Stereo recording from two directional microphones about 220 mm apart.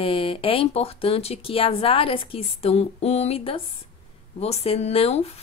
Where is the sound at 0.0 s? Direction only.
25° left (ahead or behind).